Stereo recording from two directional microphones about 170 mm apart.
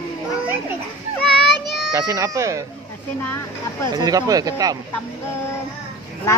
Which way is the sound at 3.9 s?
20° right (ahead or behind).